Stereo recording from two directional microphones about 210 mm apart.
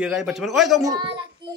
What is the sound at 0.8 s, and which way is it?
Speech, 20° right (ahead or behind).